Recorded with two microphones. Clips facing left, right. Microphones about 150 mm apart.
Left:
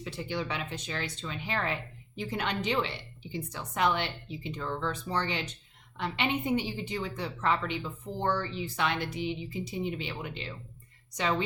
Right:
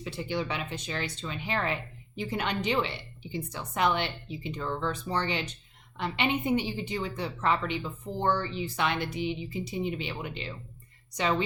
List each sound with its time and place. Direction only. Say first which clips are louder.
0.0 s speech: right 2 dB; 15° right (ahead or behind)